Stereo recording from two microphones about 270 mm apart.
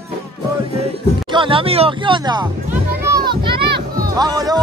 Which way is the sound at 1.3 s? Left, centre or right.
Centre.